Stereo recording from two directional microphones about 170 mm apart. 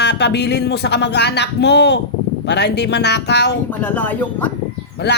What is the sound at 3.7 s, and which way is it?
Speech, 10° left (ahead or behind).